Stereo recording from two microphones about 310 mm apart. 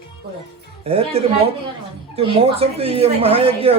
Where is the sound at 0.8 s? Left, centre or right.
Centre.